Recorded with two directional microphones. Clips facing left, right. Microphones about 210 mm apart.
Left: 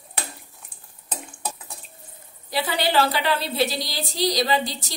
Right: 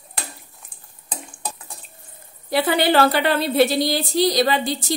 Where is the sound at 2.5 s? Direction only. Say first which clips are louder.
Right 6 dB; 55° right (ahead or behind).